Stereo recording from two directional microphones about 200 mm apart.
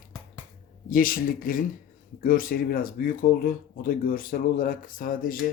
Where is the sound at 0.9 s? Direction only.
45° left (ahead or behind).